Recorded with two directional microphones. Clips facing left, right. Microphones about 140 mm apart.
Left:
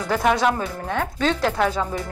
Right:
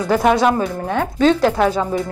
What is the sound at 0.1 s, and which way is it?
Speech, 30° right (ahead or behind).